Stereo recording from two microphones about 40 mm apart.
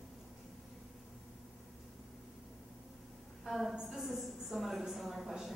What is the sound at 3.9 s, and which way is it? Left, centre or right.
A woman's voice, centre.